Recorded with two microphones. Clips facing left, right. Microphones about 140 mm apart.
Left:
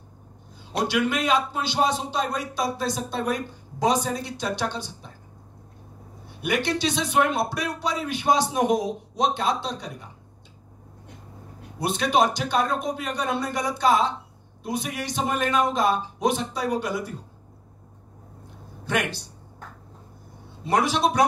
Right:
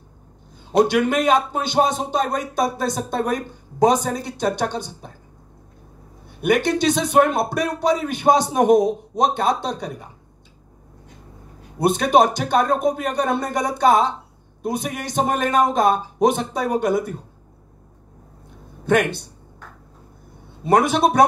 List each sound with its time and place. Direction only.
0.7 s speech: 50° right (ahead or behind)
6.2 s speech: 50° right (ahead or behind)
11.8 s speech: 50° right (ahead or behind)
18.9 s speech: 55° right (ahead or behind)
20.6 s speech: 55° right (ahead or behind)